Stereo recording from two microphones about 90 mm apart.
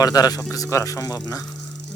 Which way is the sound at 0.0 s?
45° left (ahead or behind).